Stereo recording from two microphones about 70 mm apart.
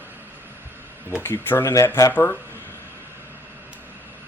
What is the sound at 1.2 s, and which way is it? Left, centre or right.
Speech, left.